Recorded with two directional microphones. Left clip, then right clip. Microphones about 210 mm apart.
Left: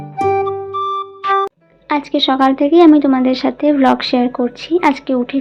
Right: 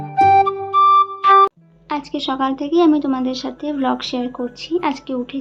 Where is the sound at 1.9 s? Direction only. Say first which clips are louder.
Left 8 dB; 15° left (ahead or behind).